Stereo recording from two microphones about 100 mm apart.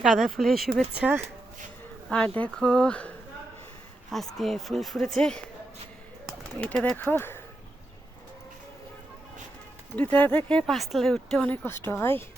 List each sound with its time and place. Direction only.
0.0 s speech: centre (ahead or behind)
0.9 s speech: 15° right (ahead or behind)
2.0 s speech: 5° left (ahead or behind)
4.1 s speech: centre (ahead or behind)
6.6 s speech: 10° left (ahead or behind)
9.9 s speech: 15° left (ahead or behind)
10.5 s speech: centre (ahead or behind)
11.5 s speech: 20° left (ahead or behind)